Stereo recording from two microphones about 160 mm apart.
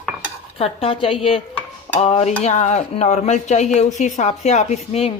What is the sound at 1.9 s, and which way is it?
Speech, 40° left (ahead or behind).